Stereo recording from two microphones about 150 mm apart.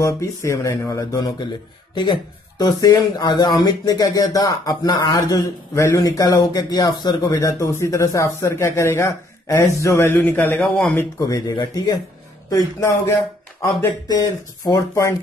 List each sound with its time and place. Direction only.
0.0 s speech: 20° left (ahead or behind)
2.6 s speech: 25° left (ahead or behind)
10.6 s speech: 5° left (ahead or behind)
11.0 s speech: 20° left (ahead or behind)